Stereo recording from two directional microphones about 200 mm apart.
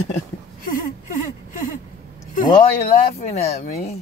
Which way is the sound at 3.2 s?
30° left (ahead or behind).